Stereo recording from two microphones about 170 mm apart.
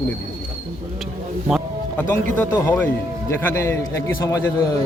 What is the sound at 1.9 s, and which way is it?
A man's voice, 10° left (ahead or behind).